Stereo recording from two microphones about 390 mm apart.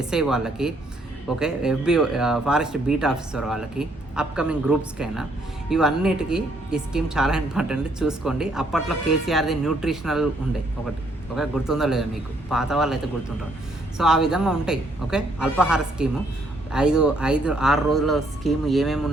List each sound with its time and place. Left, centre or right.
0.0 s speech: centre
11.3 s speech: centre
14.0 s speech: centre